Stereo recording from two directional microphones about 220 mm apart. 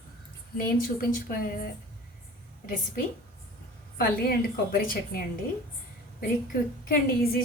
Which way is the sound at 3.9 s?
40° left (ahead or behind).